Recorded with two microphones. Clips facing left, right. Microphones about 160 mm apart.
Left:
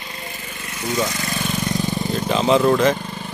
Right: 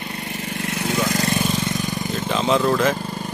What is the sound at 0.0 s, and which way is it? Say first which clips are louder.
Vehicle: right 5 dB; 65° right (ahead or behind).